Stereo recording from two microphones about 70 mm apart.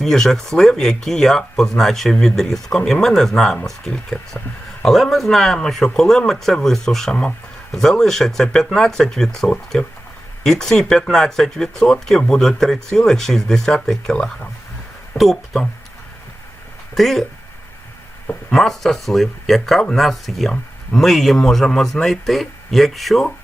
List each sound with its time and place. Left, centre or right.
0.0 s speech: centre
16.9 s speech: centre
18.5 s speech: centre